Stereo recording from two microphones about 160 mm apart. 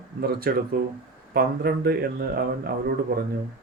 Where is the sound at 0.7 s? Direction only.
60° right (ahead or behind).